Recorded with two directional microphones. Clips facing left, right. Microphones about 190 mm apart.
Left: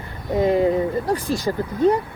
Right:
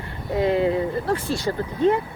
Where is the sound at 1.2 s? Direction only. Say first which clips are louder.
Left 2 dB; 15° left (ahead or behind).